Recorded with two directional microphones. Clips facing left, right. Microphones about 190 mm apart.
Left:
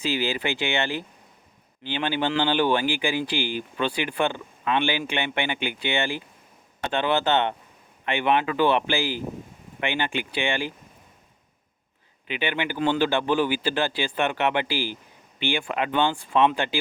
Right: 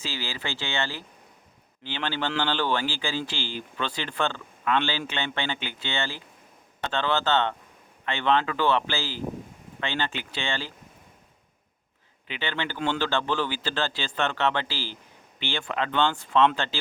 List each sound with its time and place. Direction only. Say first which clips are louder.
0.0 s a man's voice: left 8 dB; 15° left (ahead or behind)
12.3 s a man's voice: left 4 dB; 15° left (ahead or behind)